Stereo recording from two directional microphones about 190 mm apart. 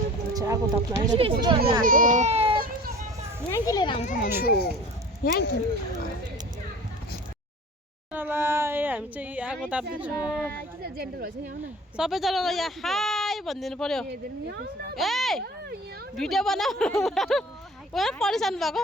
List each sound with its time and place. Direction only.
0.3 s speech: 20° right (ahead or behind)
1.8 s speech: 45° right (ahead or behind); by 2.6 s 30° right (ahead or behind)
3.5 s a child's voice: 20° left (ahead or behind)
4.0 s a child's voice: 45° left (ahead or behind)
4.4 s speech: 55° left (ahead or behind)
8.1 s speech: 10° right (ahead or behind)
10.6 s a woman's voice: 55° right (ahead or behind)
11.9 s speech: centre (ahead or behind)
14.1 s speech: 60° right (ahead or behind)
14.9 s speech: centre (ahead or behind)